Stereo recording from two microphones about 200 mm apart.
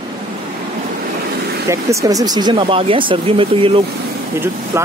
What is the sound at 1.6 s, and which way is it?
Speech, 15° right (ahead or behind).